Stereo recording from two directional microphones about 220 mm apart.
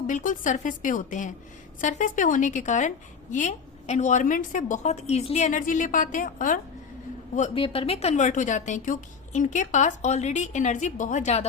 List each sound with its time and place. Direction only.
0.1 s a woman's voice: 35° left (ahead or behind)